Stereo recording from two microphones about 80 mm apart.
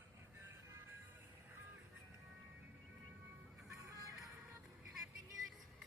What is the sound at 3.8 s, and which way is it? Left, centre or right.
Music, right.